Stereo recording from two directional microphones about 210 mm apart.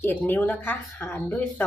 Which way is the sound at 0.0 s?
10° left (ahead or behind).